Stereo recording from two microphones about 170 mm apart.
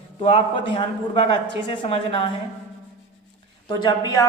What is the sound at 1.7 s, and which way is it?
Speech, 30° left (ahead or behind).